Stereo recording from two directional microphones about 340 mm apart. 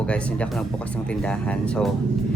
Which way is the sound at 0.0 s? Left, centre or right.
Centre.